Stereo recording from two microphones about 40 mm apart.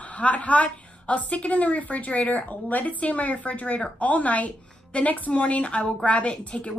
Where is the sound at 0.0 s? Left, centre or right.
Left.